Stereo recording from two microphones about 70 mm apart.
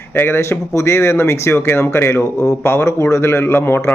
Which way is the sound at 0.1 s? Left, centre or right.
Left.